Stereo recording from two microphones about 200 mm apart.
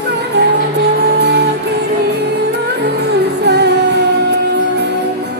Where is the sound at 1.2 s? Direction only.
55° right (ahead or behind).